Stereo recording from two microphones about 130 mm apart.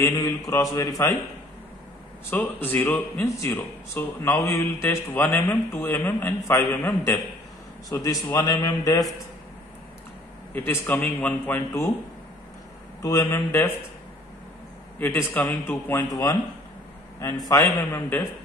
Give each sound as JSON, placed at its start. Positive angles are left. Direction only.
{"t": 0.1, "sound": "a man's voice", "side_deg": 25}
{"t": 2.2, "sound": "a man's voice", "side_deg": 15}
{"t": 10.5, "sound": "a man's voice", "side_deg": 20}
{"t": 13.0, "sound": "a man's voice", "side_deg": 25}
{"t": 15.0, "sound": "a man's voice", "side_deg": 15}